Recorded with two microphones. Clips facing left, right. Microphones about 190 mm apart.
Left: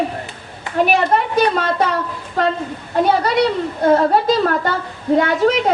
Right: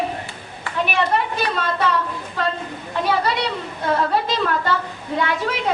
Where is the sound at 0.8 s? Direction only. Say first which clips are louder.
Left 5 dB; 45° left (ahead or behind).